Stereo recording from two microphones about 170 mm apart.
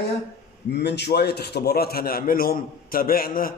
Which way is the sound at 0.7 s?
85° left.